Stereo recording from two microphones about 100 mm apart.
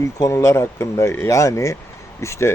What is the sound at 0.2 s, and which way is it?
Speech, 30° left (ahead or behind).